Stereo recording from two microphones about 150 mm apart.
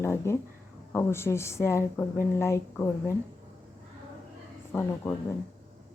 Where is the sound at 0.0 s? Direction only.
15° left (ahead or behind).